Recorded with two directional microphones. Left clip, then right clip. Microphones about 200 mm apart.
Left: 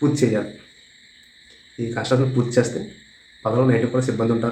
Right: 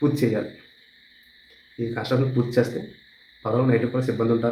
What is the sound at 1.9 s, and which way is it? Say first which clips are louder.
Speech: left 4 dB; 5° left (ahead or behind).